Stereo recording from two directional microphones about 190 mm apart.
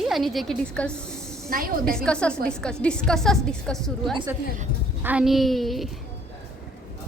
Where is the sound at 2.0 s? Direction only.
5° left (ahead or behind).